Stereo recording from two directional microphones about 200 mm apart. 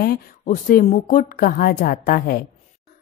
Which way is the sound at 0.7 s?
40° left (ahead or behind).